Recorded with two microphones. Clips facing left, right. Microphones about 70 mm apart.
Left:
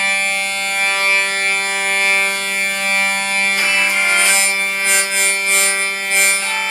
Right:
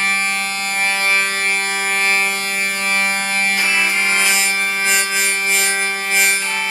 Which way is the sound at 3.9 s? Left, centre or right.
Left.